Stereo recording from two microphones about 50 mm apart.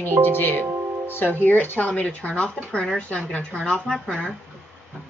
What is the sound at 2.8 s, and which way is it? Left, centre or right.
Speech, centre.